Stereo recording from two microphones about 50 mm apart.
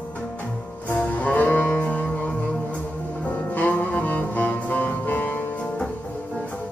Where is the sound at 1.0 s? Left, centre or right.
Left.